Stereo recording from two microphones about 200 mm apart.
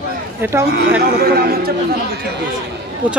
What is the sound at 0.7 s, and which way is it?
Speech, 50° right (ahead or behind).